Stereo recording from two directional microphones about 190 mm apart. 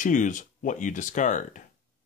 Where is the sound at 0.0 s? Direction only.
40° left (ahead or behind).